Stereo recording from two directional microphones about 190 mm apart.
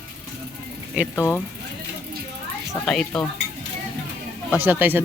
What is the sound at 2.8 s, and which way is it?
Speech, 5° left (ahead or behind).